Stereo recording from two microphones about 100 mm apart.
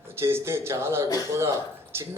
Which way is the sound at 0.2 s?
25° right (ahead or behind).